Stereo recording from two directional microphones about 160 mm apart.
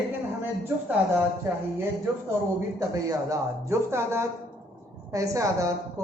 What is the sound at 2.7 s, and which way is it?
A woman's voice, 20° right (ahead or behind).